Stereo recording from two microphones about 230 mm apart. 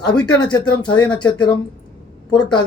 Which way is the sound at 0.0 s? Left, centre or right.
Centre.